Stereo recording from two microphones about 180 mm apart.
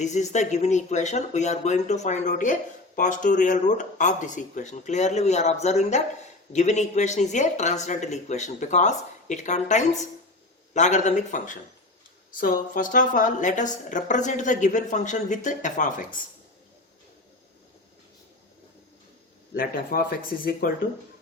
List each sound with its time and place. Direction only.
0.0 s a woman's voice: 40° left (ahead or behind)
19.5 s a woman's voice: 55° left (ahead or behind)